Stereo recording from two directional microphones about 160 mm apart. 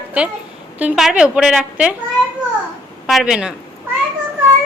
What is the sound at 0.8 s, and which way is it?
A woman's voice, 5° right (ahead or behind).